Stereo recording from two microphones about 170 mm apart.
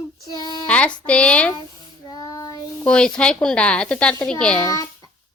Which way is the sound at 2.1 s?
20° left (ahead or behind).